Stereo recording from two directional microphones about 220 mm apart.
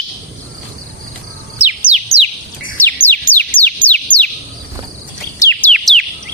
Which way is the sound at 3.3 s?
10° left (ahead or behind).